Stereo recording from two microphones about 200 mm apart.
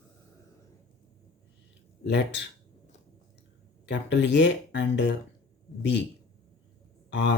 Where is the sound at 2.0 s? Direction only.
60° left (ahead or behind).